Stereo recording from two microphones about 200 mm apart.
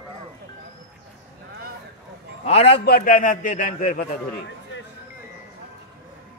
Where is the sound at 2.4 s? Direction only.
30° left (ahead or behind).